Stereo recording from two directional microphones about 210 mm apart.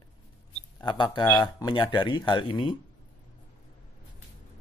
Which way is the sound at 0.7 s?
20° left (ahead or behind).